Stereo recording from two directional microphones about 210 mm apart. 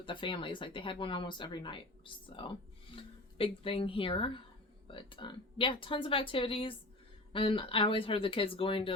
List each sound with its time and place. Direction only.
0.0 s speech: 25° left (ahead or behind)